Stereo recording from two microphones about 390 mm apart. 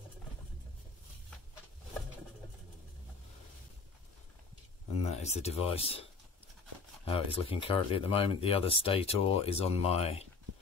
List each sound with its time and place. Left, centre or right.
5.0 s speech: centre
7.1 s speech: centre